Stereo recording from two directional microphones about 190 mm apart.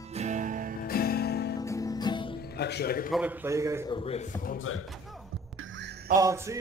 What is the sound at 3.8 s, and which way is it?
Speech, 30° left (ahead or behind).